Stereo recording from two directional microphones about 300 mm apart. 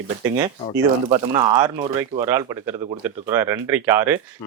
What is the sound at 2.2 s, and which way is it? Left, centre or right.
Speech, centre.